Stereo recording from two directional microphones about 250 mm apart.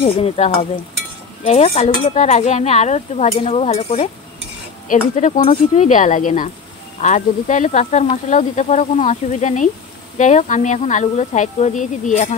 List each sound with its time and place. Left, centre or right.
0.0 s speech: left